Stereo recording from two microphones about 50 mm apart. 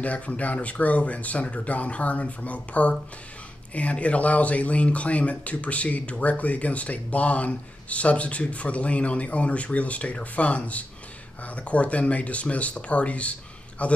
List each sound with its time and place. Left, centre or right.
0.0 s speech: left